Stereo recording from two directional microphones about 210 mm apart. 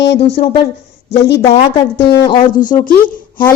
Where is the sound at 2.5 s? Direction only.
40° left (ahead or behind).